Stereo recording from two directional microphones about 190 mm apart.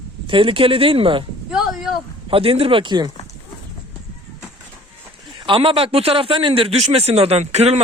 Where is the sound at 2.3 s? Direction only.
30° right (ahead or behind).